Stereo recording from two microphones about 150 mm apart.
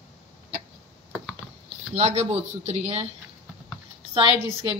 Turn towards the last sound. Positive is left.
turn(degrees=-35)  # may be behind; listen again after turning